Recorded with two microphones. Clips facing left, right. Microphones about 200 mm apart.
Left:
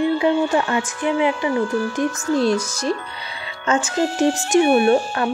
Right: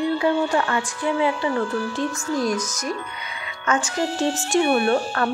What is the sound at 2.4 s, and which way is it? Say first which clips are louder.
Speech: left 5 dB; 30° left (ahead or behind).